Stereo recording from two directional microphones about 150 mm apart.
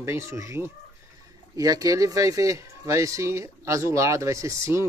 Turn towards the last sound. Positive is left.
turn(degrees=-20)  # may be behind; listen again after turning